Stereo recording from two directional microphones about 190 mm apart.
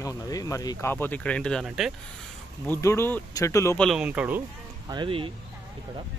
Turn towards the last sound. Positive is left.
turn(degrees=-25)  # may be behind; listen again after turning